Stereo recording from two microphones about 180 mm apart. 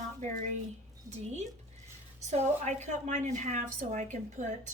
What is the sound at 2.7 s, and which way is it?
A woman's voice, 40° right (ahead or behind).